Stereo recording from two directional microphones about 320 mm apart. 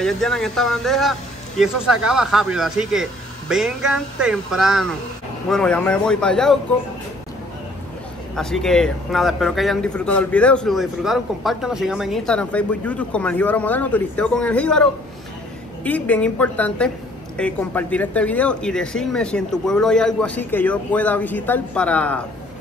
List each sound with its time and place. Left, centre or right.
0.0 s a man's voice: centre
8.4 s a man's voice: centre